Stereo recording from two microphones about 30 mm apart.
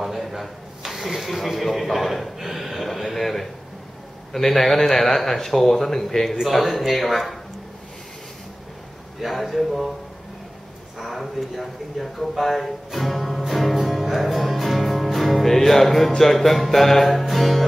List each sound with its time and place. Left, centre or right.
0.0 s a sound: centre
0.8 s speech: centre
2.3 s speech: centre
9.2 s speech: centre
11.0 s speech: centre
14.0 s music: centre
16.2 s speech: centre